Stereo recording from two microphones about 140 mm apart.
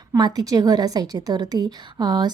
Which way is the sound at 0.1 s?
30° right (ahead or behind).